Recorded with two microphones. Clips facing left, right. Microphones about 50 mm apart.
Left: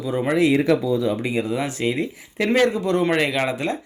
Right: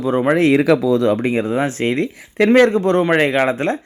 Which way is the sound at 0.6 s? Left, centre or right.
Right.